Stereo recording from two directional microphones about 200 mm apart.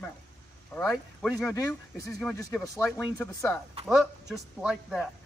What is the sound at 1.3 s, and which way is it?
Speech, 15° left (ahead or behind).